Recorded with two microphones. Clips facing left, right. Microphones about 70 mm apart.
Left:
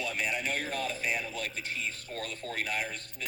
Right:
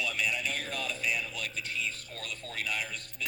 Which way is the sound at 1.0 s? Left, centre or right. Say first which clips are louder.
Left 1 dB; left.